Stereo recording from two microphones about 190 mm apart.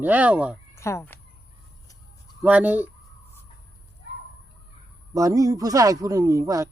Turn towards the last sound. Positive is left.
turn(degrees=-15)  # may be behind; listen again after turning